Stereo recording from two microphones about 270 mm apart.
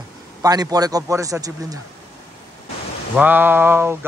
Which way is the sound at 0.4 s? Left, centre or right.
Centre.